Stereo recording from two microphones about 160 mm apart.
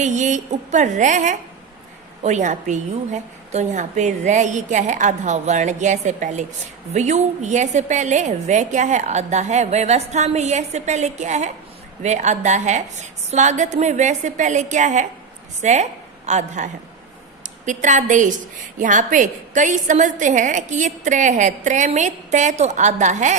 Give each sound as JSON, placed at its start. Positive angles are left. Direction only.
{"t": 0.0, "sound": "a woman's voice", "side_deg": -50}
{"t": 17.7, "sound": "a woman's voice", "side_deg": -50}